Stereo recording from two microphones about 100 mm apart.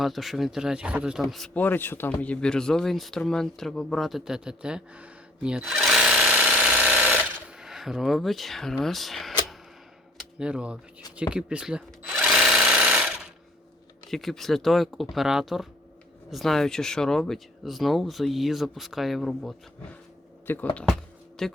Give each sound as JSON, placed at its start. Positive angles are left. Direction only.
{"t": 0.0, "sound": "speech", "side_deg": 0}
{"t": 1.5, "sound": "speech", "side_deg": 20}
{"t": 10.3, "sound": "speech", "side_deg": -10}
{"t": 11.2, "sound": "drill", "side_deg": -10}
{"t": 14.1, "sound": "speech", "side_deg": 0}
{"t": 20.5, "sound": "speech", "side_deg": 20}
{"t": 21.4, "sound": "speech", "side_deg": 5}